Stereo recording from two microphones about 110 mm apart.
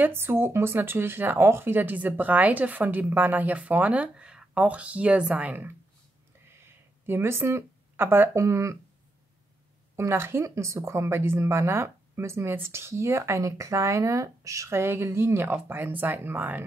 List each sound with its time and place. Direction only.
0.0 s speech: 20° right (ahead or behind)
9.9 s speech: 25° right (ahead or behind)